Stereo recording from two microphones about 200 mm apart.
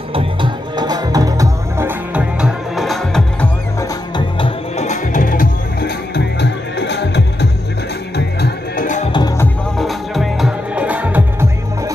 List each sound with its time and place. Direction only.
0.1 s music: 25° right (ahead or behind); by 3.4 s 5° left (ahead or behind)
4.4 s music: 35° left (ahead or behind); by 7.4 s 60° left (ahead or behind)
8.4 s music: 40° left (ahead or behind)
9.1 s music: 20° left (ahead or behind)
9.8 s music: centre (ahead or behind)